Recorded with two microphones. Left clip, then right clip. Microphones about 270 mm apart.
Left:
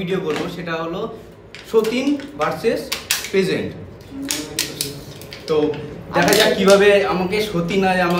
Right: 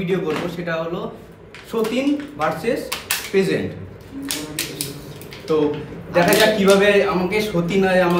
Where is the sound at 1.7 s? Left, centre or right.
Centre.